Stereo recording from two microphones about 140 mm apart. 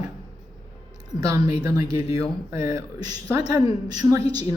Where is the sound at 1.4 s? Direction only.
45° left (ahead or behind).